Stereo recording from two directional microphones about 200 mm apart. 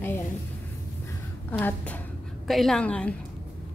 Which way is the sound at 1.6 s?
5° left (ahead or behind).